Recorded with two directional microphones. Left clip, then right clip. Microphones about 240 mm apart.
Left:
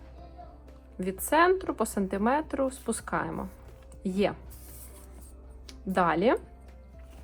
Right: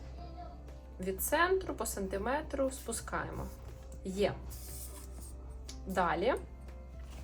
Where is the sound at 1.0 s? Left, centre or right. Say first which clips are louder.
Left 7 dB; left.